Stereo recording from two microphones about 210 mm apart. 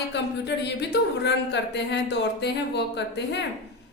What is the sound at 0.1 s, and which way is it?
Speech, 55° left (ahead or behind).